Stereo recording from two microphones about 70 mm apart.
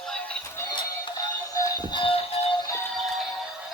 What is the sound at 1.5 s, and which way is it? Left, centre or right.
Train, left.